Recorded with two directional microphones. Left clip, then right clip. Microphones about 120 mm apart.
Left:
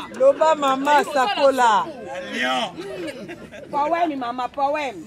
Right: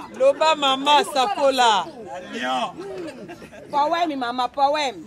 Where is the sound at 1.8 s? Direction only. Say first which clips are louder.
Left 3 dB; 10° left (ahead or behind).